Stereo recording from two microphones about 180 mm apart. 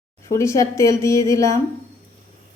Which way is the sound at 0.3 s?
15° left (ahead or behind).